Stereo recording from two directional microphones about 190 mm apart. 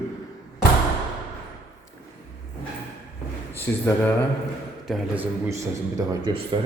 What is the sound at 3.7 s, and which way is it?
Speech, 10° left (ahead or behind).